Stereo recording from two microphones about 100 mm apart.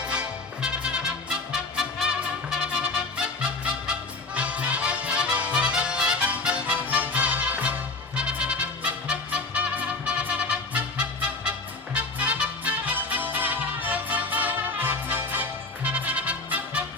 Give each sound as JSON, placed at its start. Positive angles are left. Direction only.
{"t": 0.0, "sound": "music", "side_deg": -10}